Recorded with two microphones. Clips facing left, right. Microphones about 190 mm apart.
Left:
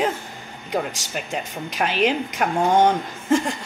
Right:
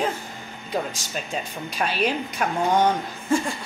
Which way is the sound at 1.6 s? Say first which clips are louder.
Left 4 dB; 15° left (ahead or behind).